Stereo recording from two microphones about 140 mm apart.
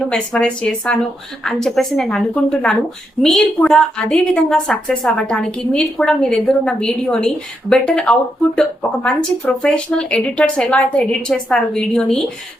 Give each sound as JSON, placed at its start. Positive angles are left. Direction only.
{"t": 0.1, "sound": "a woman's voice", "side_deg": 5}